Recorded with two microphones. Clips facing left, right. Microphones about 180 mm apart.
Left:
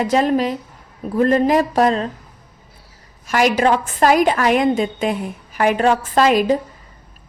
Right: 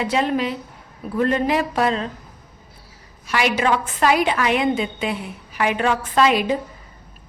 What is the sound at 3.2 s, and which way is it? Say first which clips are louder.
A woman's voice: left 4 dB; 45° left (ahead or behind).